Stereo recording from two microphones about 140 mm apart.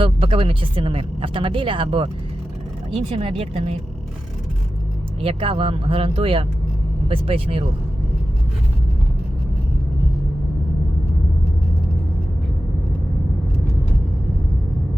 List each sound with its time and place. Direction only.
0.0 s speech: 40° right (ahead or behind)
5.2 s speech: 40° right (ahead or behind)